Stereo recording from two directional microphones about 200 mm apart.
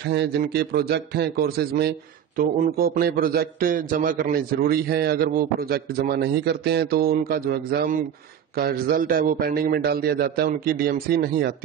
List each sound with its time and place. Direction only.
0.0 s a man's voice: 60° right (ahead or behind)